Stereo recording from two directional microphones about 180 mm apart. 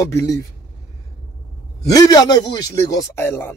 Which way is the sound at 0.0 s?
20° left (ahead or behind).